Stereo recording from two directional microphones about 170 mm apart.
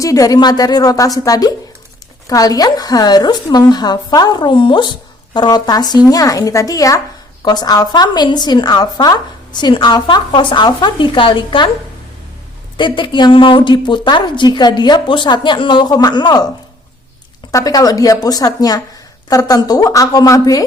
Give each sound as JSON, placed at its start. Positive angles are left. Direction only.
{"t": 0.0, "sound": "a woman's voice", "side_deg": 20}
{"t": 12.7, "sound": "a woman's voice", "side_deg": 30}
{"t": 17.5, "sound": "a woman's voice", "side_deg": 20}